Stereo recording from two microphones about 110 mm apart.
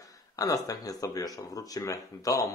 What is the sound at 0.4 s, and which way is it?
Speech, 35° left (ahead or behind).